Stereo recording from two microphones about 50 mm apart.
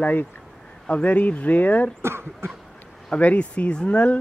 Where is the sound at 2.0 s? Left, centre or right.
Right.